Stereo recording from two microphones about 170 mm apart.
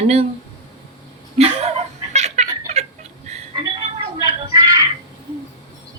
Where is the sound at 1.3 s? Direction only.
40° right (ahead or behind).